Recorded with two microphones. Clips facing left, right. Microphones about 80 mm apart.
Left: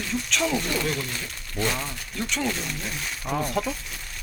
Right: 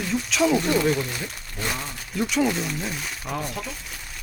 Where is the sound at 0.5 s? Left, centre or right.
Right.